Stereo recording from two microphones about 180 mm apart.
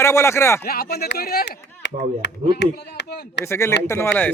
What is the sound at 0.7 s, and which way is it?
Speech, 60° left (ahead or behind).